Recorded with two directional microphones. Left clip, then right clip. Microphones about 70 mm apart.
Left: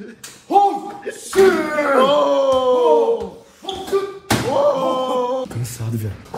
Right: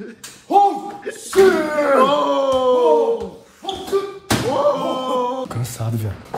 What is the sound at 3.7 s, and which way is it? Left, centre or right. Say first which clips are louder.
Slam: even; right.